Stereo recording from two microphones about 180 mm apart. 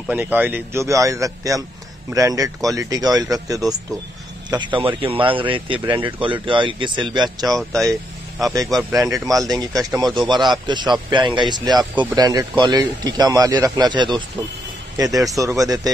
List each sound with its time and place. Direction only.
0.1 s a man's voice: 10° right (ahead or behind)
7.4 s speech: centre (ahead or behind)
8.9 s speech: 20° right (ahead or behind)